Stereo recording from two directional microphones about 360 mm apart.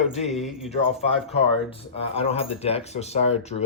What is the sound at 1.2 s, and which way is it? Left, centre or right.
Speech, centre.